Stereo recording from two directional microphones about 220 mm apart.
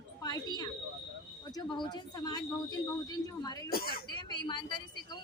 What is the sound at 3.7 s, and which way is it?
Speech, 40° left (ahead or behind).